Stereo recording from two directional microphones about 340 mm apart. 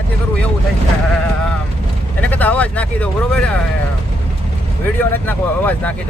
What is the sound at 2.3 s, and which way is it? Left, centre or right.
Speech, centre.